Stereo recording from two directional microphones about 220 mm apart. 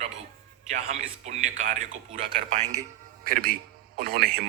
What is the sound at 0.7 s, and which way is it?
A man's voice, 30° right (ahead or behind).